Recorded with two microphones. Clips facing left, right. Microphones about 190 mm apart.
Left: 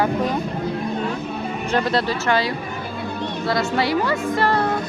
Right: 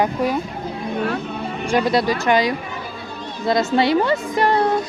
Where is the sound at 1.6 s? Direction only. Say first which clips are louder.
Right 3 dB; 10° right (ahead or behind).